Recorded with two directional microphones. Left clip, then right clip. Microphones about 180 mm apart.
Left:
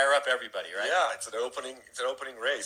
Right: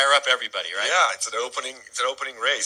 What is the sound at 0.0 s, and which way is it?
Speech, 10° right (ahead or behind).